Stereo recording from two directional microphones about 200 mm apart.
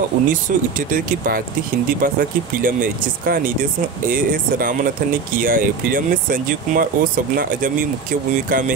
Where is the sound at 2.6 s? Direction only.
45° right (ahead or behind).